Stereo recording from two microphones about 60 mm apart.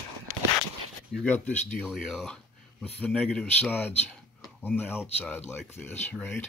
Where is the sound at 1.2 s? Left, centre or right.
Left.